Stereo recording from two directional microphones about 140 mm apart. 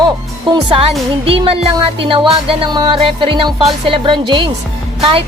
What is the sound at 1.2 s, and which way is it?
Speech, 40° right (ahead or behind).